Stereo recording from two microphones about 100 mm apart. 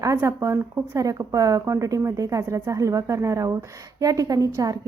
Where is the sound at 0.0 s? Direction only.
30° right (ahead or behind).